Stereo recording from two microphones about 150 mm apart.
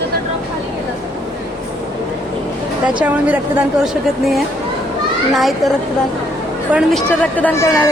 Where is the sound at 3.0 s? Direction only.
10° right (ahead or behind).